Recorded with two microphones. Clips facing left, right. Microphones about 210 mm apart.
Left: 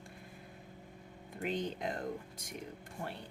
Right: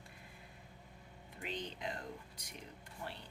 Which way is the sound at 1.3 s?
45° left (ahead or behind).